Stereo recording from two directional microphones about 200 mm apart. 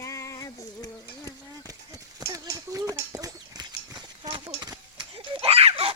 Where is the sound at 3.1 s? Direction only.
20° right (ahead or behind).